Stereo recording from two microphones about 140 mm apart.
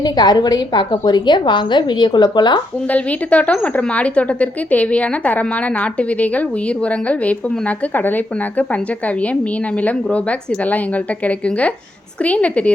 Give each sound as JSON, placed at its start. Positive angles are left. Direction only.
{"t": 0.0, "sound": "a woman's voice", "side_deg": 30}
{"t": 2.8, "sound": "a woman's voice", "side_deg": 10}